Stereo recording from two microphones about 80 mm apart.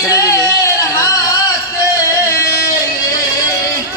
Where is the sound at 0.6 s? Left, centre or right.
Left.